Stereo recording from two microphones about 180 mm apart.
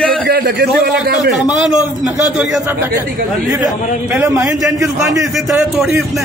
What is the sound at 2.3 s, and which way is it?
Speech, 10° right (ahead or behind).